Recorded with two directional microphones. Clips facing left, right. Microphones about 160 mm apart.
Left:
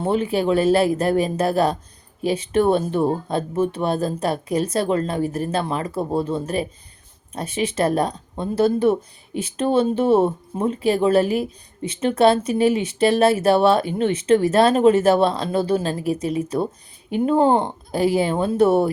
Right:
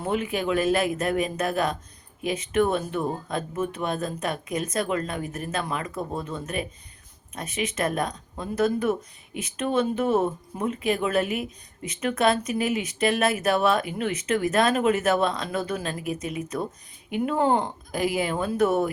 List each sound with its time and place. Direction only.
0.0 s speech: 30° left (ahead or behind)